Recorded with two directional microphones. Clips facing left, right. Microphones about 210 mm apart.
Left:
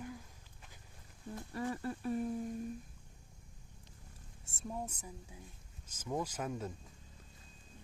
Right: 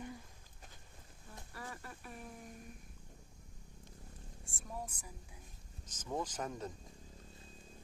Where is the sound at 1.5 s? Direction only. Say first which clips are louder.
Left 11 dB; 25° left (ahead or behind).